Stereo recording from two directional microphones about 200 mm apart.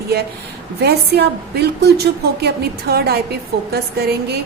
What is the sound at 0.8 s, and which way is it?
A woman's voice, 55° right (ahead or behind).